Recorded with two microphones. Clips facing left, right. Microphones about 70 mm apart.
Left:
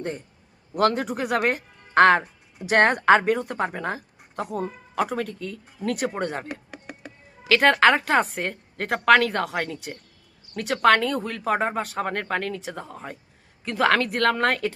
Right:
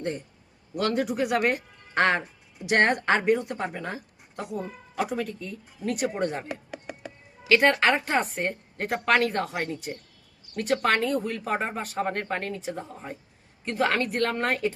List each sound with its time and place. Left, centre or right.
0.8 s speech: left
3.3 s speech: left
3.7 s speech: left
6.0 s speech: left
6.5 s a sound: centre
7.4 s speech: left
13.7 s speech: left